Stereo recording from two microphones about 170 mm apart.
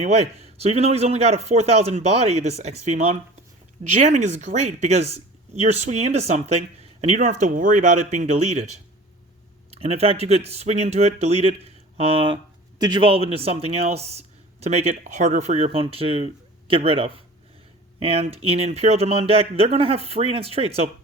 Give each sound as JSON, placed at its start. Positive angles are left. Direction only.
{"t": 0.0, "sound": "speech", "side_deg": -40}
{"t": 9.8, "sound": "speech", "side_deg": -35}